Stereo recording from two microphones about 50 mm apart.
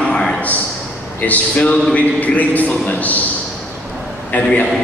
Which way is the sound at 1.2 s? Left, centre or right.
Left.